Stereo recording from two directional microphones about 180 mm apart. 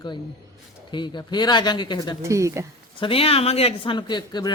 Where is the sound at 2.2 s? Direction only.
15° right (ahead or behind).